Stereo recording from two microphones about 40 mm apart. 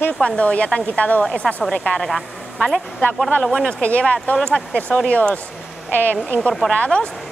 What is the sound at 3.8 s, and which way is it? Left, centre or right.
Speech, left.